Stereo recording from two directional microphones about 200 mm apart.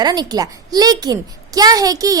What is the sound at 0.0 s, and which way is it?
A woman's voice, 20° right (ahead or behind).